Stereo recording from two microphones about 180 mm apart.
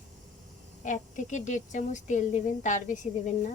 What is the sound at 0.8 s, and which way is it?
A woman's voice, 45° left (ahead or behind).